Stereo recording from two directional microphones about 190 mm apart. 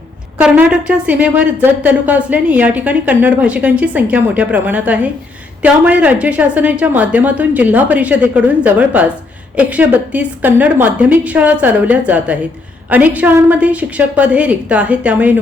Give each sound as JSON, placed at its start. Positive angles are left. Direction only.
{"t": 0.3, "sound": "speech", "side_deg": -10}